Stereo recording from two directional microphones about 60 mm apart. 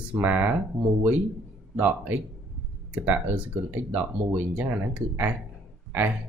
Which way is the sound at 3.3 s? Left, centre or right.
Right.